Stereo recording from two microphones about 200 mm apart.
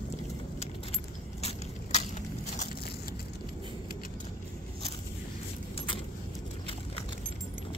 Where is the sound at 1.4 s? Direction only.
30° left (ahead or behind).